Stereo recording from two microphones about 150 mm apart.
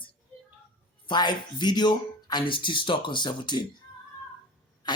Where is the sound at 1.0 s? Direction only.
30° left (ahead or behind).